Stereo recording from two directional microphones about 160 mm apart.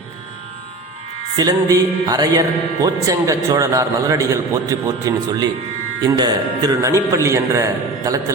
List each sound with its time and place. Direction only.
1.4 s a man's voice: 20° right (ahead or behind)